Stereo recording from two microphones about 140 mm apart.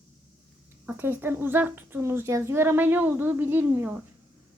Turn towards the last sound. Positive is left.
turn(degrees=-15)  # may be behind; listen again after turning